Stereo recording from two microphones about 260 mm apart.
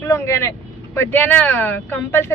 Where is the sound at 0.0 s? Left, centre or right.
Centre.